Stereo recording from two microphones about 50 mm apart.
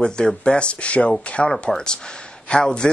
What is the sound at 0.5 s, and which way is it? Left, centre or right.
Speech, left.